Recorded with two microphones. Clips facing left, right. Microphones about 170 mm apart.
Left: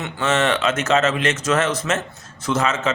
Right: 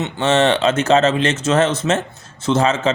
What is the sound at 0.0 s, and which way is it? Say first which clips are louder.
Speech: right 5 dB; 30° right (ahead or behind).